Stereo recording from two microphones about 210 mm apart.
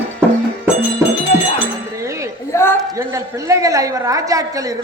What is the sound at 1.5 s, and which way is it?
Chink, 15° right (ahead or behind).